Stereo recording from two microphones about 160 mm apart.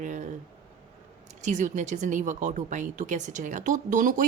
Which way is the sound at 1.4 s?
50° right (ahead or behind).